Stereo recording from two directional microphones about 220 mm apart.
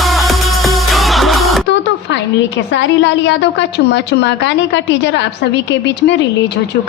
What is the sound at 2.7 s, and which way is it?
A woman's voice, 55° left (ahead or behind).